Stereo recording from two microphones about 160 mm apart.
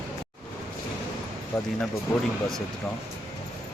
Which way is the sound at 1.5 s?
15° left (ahead or behind).